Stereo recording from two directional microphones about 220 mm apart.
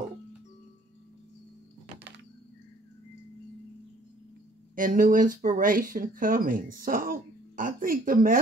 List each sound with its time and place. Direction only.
4.7 s speech: 35° right (ahead or behind)